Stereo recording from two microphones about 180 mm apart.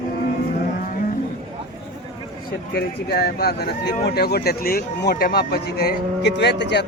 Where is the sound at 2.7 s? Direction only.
60° left (ahead or behind).